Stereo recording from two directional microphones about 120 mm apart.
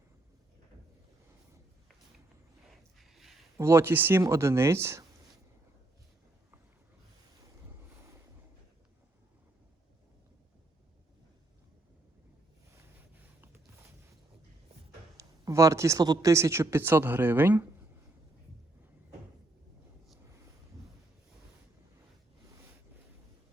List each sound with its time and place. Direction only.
2.6 s a sound: centre (ahead or behind)
3.6 s speech: 20° right (ahead or behind)
15.2 s speech: 25° right (ahead or behind)